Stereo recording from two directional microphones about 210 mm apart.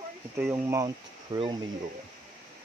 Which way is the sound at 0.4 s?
10° right (ahead or behind).